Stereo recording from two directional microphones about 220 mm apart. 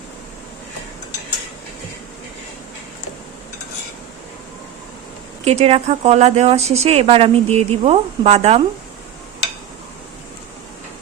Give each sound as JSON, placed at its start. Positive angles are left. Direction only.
{"t": 5.5, "sound": "speech", "side_deg": -30}